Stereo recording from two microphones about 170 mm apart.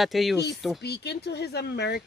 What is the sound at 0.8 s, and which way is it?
Speech, 75° left (ahead or behind).